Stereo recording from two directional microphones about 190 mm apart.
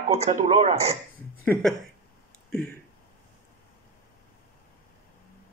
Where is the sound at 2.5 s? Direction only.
5° left (ahead or behind).